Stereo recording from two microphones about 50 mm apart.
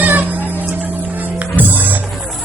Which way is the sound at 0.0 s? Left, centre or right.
Right.